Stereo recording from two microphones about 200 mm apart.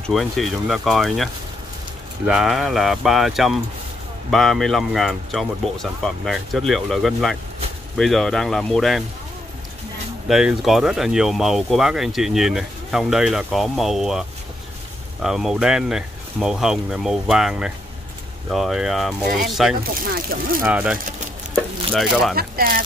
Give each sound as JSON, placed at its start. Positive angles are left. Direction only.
{"t": 0.0, "sound": "speech", "side_deg": 0}
{"t": 10.2, "sound": "speech", "side_deg": 0}
{"t": 15.2, "sound": "speech", "side_deg": 0}
{"t": 20.0, "sound": "speech", "side_deg": -50}
{"t": 20.6, "sound": "speech", "side_deg": -5}
{"t": 22.3, "sound": "speech", "side_deg": -45}